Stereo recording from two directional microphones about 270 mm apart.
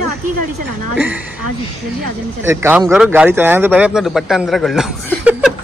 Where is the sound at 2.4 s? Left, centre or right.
Centre.